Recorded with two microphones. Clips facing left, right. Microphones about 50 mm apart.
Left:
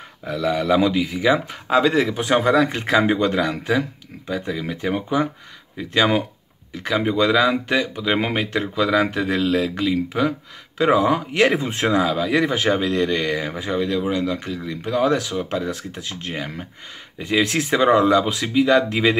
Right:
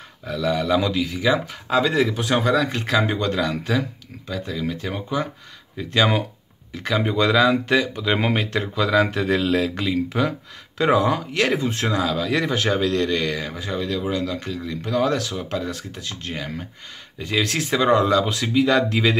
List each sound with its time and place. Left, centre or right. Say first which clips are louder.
0.2 s speech: left 1 dB; centre
5.8 s speech: left 1 dB; centre